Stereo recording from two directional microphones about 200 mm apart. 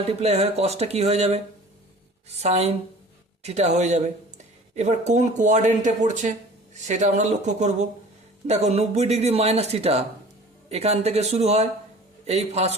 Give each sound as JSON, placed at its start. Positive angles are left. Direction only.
{"t": 0.0, "sound": "speech", "side_deg": -30}